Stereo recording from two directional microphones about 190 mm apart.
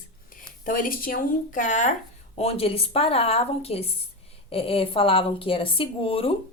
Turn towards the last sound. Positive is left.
turn(degrees=30)  # may be behind; listen again after turning